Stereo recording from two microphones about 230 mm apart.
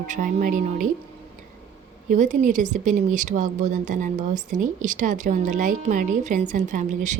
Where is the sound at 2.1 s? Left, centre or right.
Right.